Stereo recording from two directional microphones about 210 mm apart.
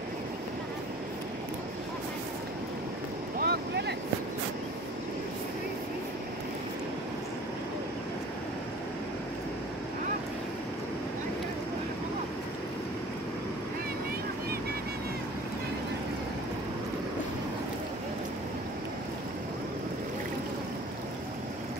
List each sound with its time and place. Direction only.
3.3 s vehicle: 50° right (ahead or behind)